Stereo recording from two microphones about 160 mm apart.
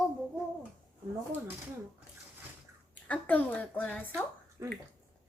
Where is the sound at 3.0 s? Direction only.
10° left (ahead or behind).